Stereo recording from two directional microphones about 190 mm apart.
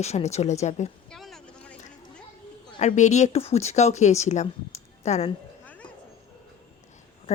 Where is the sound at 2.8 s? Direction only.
40° left (ahead or behind).